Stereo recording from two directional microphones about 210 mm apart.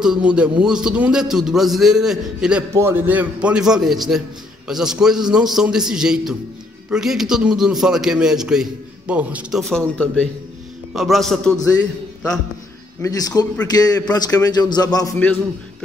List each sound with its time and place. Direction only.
0.0 s a man's voice: 5° right (ahead or behind)
13.0 s a man's voice: 15° left (ahead or behind)